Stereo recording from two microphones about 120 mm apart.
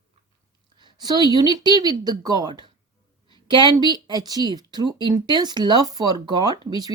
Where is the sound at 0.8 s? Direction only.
40° right (ahead or behind).